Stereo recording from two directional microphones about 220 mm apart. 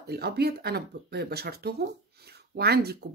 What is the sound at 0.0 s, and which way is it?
A woman's voice, 45° right (ahead or behind).